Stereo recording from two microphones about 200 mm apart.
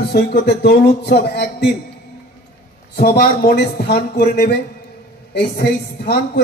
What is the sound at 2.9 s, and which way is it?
A woman's voice, 50° left (ahead or behind).